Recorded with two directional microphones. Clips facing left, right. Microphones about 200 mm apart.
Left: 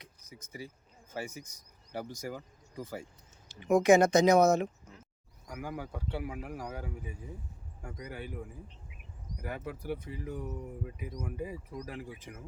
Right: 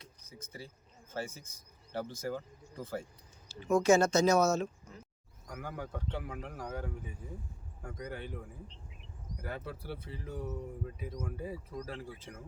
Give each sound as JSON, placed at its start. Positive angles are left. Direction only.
{"t": 0.0, "sound": "a sound", "side_deg": 15}
{"t": 1.1, "sound": "speech", "side_deg": 15}
{"t": 9.4, "sound": "speech", "side_deg": 15}